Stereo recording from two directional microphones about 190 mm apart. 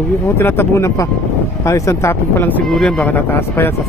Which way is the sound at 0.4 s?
10° left (ahead or behind).